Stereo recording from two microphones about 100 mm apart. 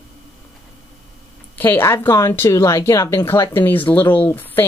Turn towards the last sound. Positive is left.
turn(degrees=20)  # may be behind; listen again after turning